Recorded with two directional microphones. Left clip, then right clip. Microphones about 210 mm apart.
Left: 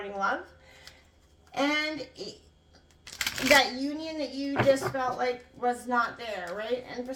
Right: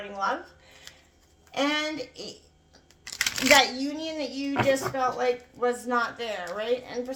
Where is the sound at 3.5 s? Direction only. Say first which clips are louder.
Right 1 dB; 35° right (ahead or behind).